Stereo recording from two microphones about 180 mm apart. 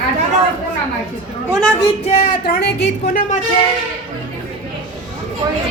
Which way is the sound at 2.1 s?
45° left (ahead or behind).